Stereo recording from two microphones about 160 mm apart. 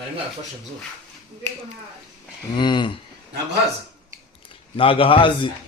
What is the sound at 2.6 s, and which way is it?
Speech, 30° left (ahead or behind).